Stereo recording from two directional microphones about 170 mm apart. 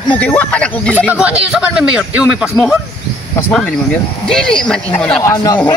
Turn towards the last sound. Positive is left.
turn(degrees=20)  # may be behind; listen again after turning